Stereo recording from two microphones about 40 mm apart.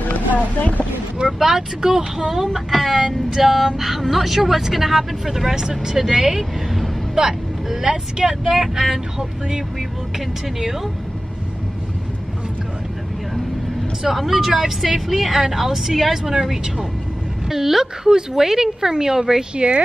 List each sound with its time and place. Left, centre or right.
0.0 s vehicle: left
1.1 s speech: centre
8.7 s speech: centre
10.1 s speech: centre
14.0 s a woman's voice: centre
19.5 s speech: right